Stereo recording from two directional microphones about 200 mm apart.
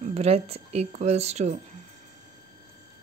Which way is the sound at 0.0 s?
30° right (ahead or behind).